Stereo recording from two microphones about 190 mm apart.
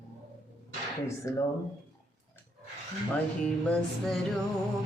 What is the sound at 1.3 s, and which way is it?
Music, 15° left (ahead or behind).